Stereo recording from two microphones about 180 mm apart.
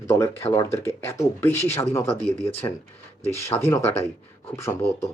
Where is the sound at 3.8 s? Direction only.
35° left (ahead or behind).